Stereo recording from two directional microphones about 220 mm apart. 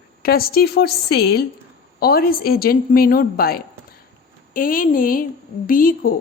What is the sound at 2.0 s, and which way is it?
A woman's voice, 45° left (ahead or behind).